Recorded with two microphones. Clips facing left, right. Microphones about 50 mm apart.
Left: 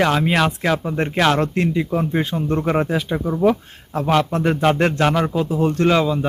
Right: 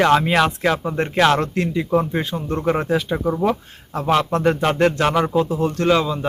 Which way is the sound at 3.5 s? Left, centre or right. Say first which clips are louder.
Left 4 dB; centre.